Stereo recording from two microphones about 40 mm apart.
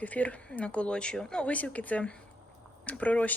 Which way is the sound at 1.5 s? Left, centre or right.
Left.